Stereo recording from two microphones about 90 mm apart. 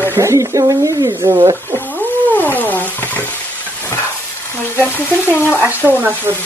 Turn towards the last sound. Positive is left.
turn(degrees=-25)  # may be behind; listen again after turning